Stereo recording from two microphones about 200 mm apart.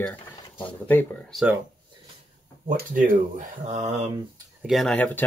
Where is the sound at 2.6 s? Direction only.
40° right (ahead or behind).